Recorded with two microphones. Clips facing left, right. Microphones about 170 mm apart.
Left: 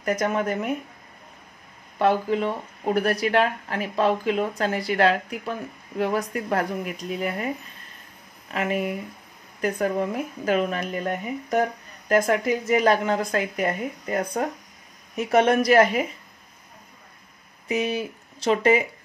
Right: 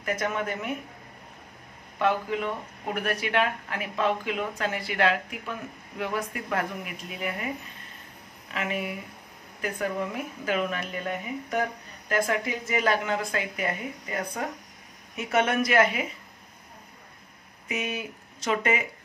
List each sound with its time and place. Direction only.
0.0 s speech: 40° left (ahead or behind)
2.0 s speech: 35° left (ahead or behind)
17.6 s speech: 35° left (ahead or behind)